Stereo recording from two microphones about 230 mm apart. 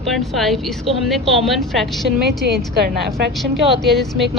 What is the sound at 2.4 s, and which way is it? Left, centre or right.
Speech, right.